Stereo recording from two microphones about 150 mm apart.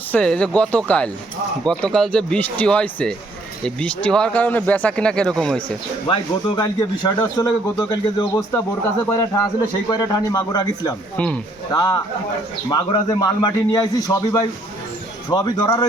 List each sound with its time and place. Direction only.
0.1 s speech: 5° left (ahead or behind)
6.6 s a man's voice: 30° left (ahead or behind)
11.2 s speech: 10° left (ahead or behind)
11.7 s a man's voice: 25° left (ahead or behind)